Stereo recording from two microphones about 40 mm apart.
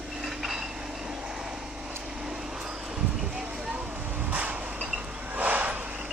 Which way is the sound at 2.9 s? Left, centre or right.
Centre.